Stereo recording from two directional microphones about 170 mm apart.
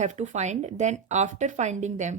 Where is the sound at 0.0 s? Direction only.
45° right (ahead or behind).